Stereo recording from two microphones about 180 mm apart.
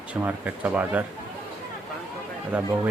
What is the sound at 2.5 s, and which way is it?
Speech, 5° right (ahead or behind).